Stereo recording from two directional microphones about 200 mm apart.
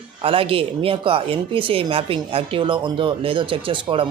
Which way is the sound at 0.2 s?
25° right (ahead or behind).